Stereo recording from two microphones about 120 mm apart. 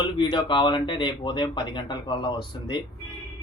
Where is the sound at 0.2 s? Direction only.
40° left (ahead or behind).